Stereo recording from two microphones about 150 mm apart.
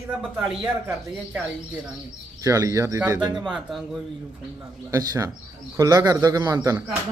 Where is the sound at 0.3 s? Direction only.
10° right (ahead or behind).